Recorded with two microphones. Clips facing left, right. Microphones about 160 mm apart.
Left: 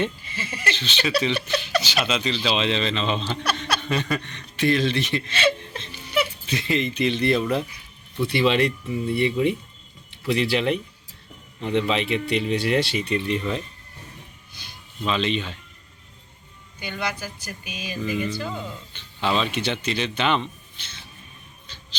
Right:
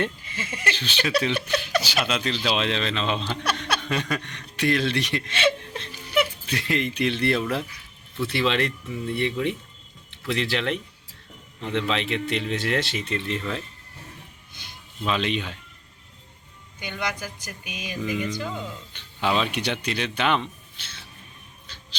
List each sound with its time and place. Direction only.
0.0 s speech: 5° right (ahead or behind)
5.5 s whimper: 5° right (ahead or behind)
6.1 s a sound: 10° right (ahead or behind)
6.6 s speech: 5° right (ahead or behind)
15.0 s speech: 5° right (ahead or behind)
17.4 s speech: 20° right (ahead or behind); by 20.5 s 5° right (ahead or behind)